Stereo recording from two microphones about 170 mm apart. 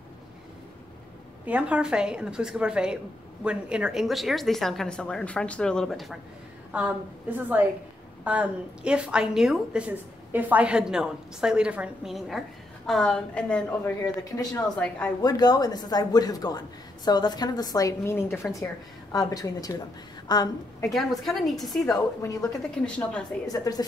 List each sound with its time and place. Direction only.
1.4 s a woman's voice: 10° right (ahead or behind); by 14.6 s 20° left (ahead or behind)
14.6 s a woman's voice: 5° left (ahead or behind)
15.2 s a man's voice: 25° left (ahead or behind)
21.2 s a woman's voice: centre (ahead or behind)
22.2 s a man's voice: 20° left (ahead or behind)